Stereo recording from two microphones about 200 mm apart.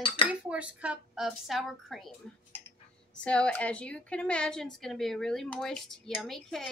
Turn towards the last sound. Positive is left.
turn(degrees=0)  # may be behind; listen again after turning